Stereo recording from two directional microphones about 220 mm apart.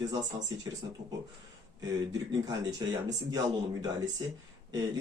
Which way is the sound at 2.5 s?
15° right (ahead or behind).